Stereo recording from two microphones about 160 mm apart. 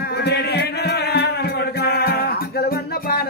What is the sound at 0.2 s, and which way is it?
Music, 90° left.